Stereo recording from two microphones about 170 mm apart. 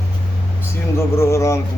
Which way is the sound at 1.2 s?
15° left (ahead or behind).